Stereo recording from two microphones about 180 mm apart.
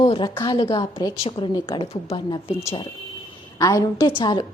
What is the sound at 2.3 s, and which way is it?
A woman's voice, 15° left (ahead or behind).